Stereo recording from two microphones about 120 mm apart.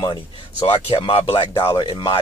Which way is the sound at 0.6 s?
50° left (ahead or behind).